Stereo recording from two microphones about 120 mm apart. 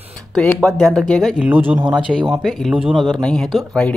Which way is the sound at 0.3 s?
5° left (ahead or behind).